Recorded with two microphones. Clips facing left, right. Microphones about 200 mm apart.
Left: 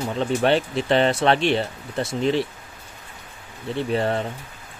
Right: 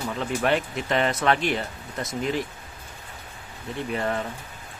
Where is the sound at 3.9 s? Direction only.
30° left (ahead or behind).